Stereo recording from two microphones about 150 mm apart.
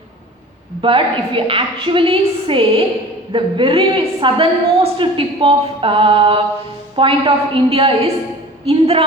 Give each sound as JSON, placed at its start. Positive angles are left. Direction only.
{"t": 0.8, "sound": "a woman's voice", "side_deg": -35}